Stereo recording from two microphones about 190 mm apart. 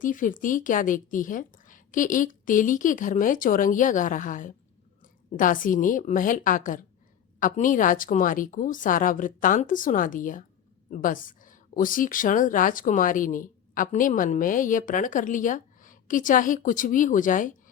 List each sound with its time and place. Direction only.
0.0 s speech: 45° left (ahead or behind)